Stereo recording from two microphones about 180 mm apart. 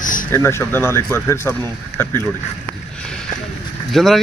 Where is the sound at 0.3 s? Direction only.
15° left (ahead or behind).